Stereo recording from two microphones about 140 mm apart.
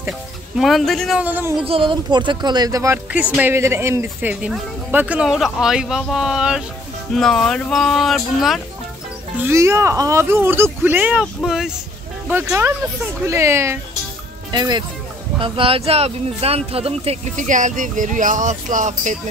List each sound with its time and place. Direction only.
0.6 s speech: centre (ahead or behind)
1.2 s speech: 10° right (ahead or behind)
1.7 s speech: 35° right (ahead or behind)
3.1 s speech: 10° right (ahead or behind)
9.4 s speech: 20° right (ahead or behind); by 11.7 s 5° right (ahead or behind)
12.3 s speech: 15° right (ahead or behind)
14.5 s speech: 30° right (ahead or behind)
17.4 s speech: 65° right (ahead or behind)